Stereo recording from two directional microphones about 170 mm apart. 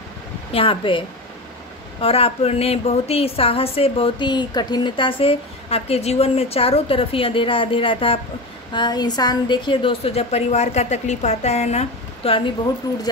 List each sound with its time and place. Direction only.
0.5 s a woman's voice: 30° left (ahead or behind)
12.9 s speech: 20° left (ahead or behind)